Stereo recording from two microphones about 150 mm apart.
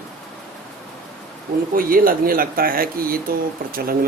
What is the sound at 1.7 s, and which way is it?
Speech, 70° right (ahead or behind).